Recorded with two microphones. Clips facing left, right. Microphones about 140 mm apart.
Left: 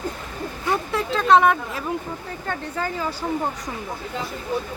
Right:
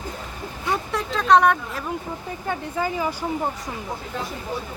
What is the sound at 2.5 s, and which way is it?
Speech, 10° right (ahead or behind).